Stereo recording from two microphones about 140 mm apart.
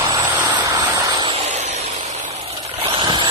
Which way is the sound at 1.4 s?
50° right (ahead or behind).